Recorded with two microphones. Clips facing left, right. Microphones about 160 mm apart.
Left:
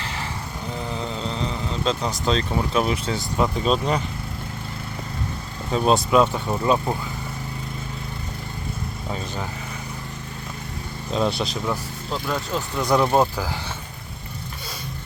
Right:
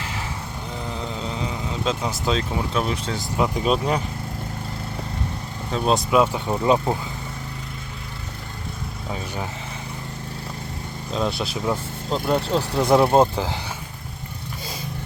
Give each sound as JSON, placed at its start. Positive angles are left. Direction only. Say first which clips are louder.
{"t": 0.0, "sound": "a sound", "louder": "even", "side_deg": -5}
{"t": 0.9, "sound": "vehicle", "louder": "even", "side_deg": 0}
{"t": 2.8, "sound": "speech", "louder": "left 2 dB", "side_deg": 5}
{"t": 3.3, "sound": "speech", "louder": "right 1 dB", "side_deg": -10}
{"t": 5.7, "sound": "speech", "louder": "left 1 dB", "side_deg": 0}
{"t": 9.1, "sound": "speech", "louder": "right 1 dB", "side_deg": -15}
{"t": 11.1, "sound": "speech", "louder": "left 2 dB", "side_deg": 0}
{"t": 11.5, "sound": "speech", "louder": "right 2 dB", "side_deg": -25}